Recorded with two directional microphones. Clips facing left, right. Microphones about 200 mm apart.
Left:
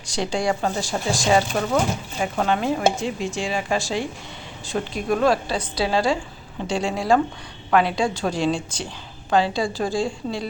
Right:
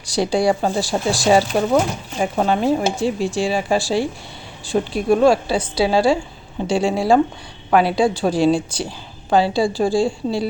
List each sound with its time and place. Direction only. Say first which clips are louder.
0.0 s a woman's voice: right 6 dB; 35° right (ahead or behind)